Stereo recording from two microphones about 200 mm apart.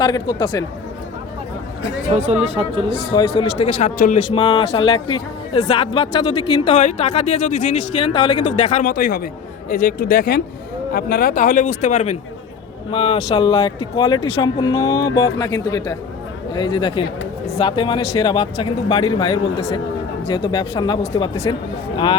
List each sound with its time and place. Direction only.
0.0 s speech: 20° left (ahead or behind)
2.1 s speech: 35° right (ahead or behind)
2.9 s speech: 25° left (ahead or behind)
3.8 s speech: 35° left (ahead or behind)
8.8 s speech: 45° left (ahead or behind); by 21.5 s 25° left (ahead or behind)